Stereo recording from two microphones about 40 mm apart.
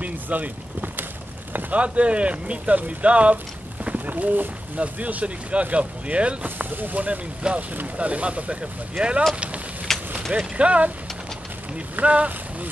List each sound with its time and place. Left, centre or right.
0.0 s a sound: right
1.7 s speech: right
6.4 s speech: right
9.9 s vehicle: centre
10.3 s speech: right
12.0 s speech: right